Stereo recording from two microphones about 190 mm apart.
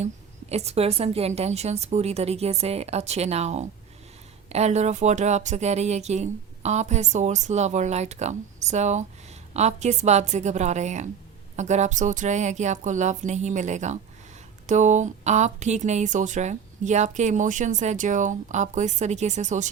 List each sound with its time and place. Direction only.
0.5 s speech: 35° right (ahead or behind)